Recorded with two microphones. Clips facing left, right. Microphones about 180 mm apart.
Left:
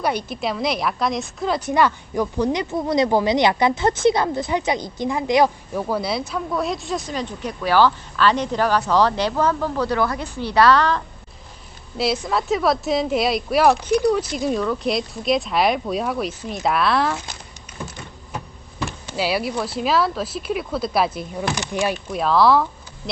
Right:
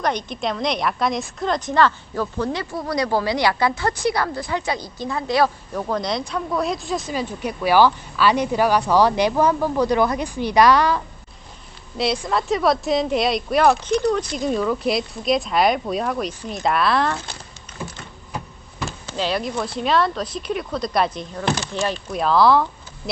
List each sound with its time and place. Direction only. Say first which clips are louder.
0.0 s a woman's voice: even; 5° left (ahead or behind)
5.8 s speech: even; 5° left (ahead or behind); by 11.0 s 10° right (ahead or behind)
11.9 s speech: even; centre (ahead or behind)
19.0 s speech: left 1 dB; 10° left (ahead or behind)